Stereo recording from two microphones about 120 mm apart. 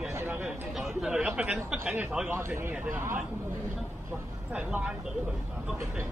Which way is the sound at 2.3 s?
20° right (ahead or behind).